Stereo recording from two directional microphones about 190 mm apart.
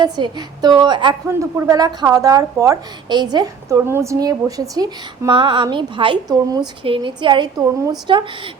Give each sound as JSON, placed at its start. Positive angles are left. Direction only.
{"t": 0.0, "sound": "a woman's voice", "side_deg": -20}